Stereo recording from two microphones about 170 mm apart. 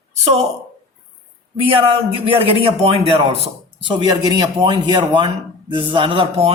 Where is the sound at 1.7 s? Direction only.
35° right (ahead or behind).